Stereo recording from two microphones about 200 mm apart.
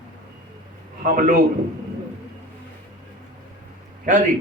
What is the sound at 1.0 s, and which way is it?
Speech, 45° right (ahead or behind).